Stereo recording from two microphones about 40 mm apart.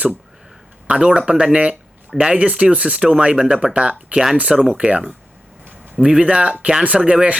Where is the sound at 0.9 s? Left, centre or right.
Right.